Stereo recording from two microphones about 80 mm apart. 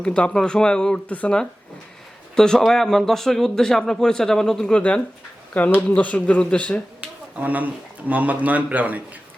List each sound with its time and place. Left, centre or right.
0.0 s a man's voice: centre
7.3 s speech: centre